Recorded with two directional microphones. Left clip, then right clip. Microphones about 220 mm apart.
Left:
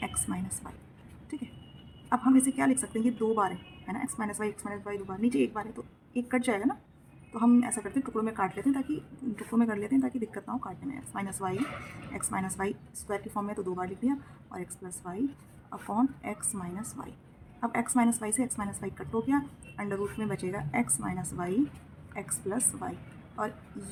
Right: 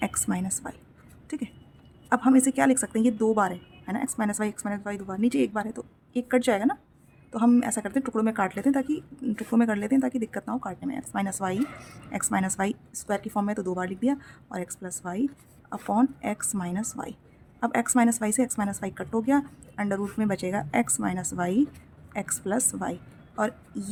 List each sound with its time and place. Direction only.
0.0 s a woman's voice: 50° right (ahead or behind)
2.0 s a woman's voice: 50° right (ahead or behind)
22.8 s a sound: 50° right (ahead or behind)